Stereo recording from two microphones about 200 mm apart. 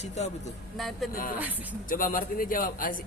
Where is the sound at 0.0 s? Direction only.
35° left (ahead or behind).